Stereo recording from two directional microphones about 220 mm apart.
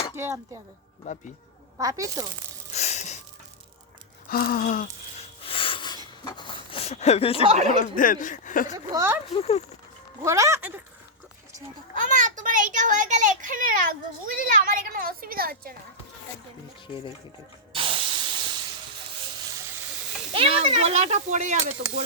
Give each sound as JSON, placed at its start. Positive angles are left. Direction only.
{"t": 0.2, "sound": "speech", "side_deg": -10}
{"t": 1.0, "sound": "speech", "side_deg": 35}
{"t": 1.8, "sound": "speech", "side_deg": -15}
{"t": 2.7, "sound": "a sound", "side_deg": 30}
{"t": 4.3, "sound": "a sound", "side_deg": 40}
{"t": 5.4, "sound": "a sound", "side_deg": 25}
{"t": 7.4, "sound": "speech", "side_deg": -25}
{"t": 7.8, "sound": "speech", "side_deg": 40}
{"t": 8.9, "sound": "speech", "side_deg": -15}
{"t": 9.3, "sound": "speech", "side_deg": 30}
{"t": 10.2, "sound": "speech", "side_deg": -15}
{"t": 11.9, "sound": "a child's voice", "side_deg": -35}
{"t": 17.7, "sound": "spray", "side_deg": -25}
{"t": 20.3, "sound": "speech", "side_deg": -25}